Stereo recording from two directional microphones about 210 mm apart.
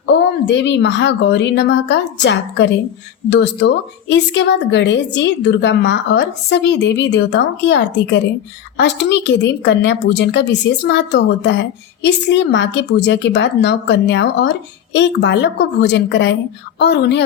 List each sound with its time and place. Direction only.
0.0 s a woman's voice: 55° left (ahead or behind)